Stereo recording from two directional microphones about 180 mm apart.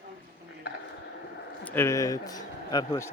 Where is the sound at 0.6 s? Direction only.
65° left (ahead or behind).